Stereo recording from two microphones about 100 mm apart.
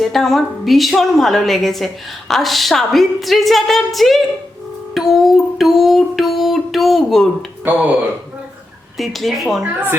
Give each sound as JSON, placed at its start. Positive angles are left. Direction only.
{"t": 0.0, "sound": "a woman's voice", "side_deg": 0}
{"t": 4.9, "sound": "music", "side_deg": 0}
{"t": 7.7, "sound": "speech", "side_deg": -20}
{"t": 9.0, "sound": "a woman's voice", "side_deg": 0}